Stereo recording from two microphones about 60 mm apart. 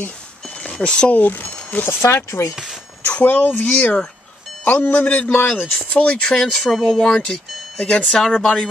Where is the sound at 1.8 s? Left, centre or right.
Left.